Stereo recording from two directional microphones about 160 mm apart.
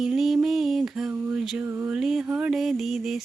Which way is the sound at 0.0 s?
Centre (ahead or behind).